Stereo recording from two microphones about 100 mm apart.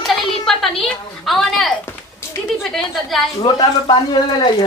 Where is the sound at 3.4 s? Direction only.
45° left (ahead or behind).